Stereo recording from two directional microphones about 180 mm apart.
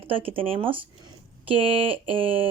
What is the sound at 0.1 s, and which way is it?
Speech, 30° right (ahead or behind).